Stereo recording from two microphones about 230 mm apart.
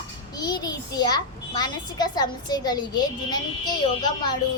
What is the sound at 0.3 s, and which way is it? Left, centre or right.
A child's voice, centre.